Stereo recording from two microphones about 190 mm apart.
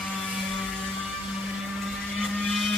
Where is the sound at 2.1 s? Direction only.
Centre (ahead or behind).